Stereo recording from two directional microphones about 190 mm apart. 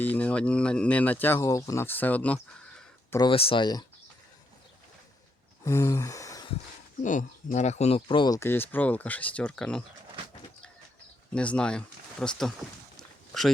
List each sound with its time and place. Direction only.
0.0 s speech: 10° left (ahead or behind)
3.2 s speech: 30° left (ahead or behind)
5.6 s a sound: 15° left (ahead or behind)
7.0 s speech: 40° left (ahead or behind); by 9.8 s 5° left (ahead or behind)
11.3 s speech: 5° left (ahead or behind)
13.0 s a sound: centre (ahead or behind)